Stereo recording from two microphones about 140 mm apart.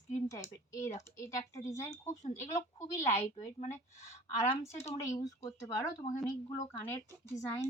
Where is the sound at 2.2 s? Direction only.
55° left (ahead or behind).